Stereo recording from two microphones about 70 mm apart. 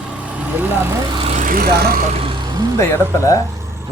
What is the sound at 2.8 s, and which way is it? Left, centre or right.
Speech, left.